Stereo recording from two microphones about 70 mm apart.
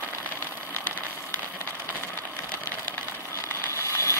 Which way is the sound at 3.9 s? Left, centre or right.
Left.